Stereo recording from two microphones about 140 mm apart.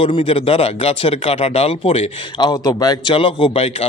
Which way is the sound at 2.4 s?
30° left (ahead or behind).